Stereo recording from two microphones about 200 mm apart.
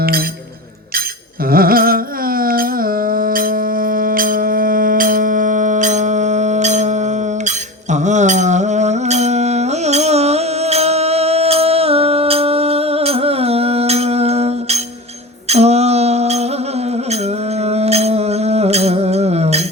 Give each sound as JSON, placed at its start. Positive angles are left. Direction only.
{"t": 1.5, "sound": "carnatic music", "side_deg": -45}
{"t": 15.4, "sound": "music", "side_deg": -30}
{"t": 17.6, "sound": "music", "side_deg": -30}